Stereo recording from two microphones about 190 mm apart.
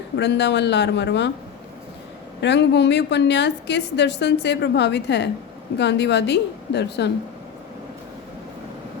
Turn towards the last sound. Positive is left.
turn(degrees=60)  # may be behind; listen again after turning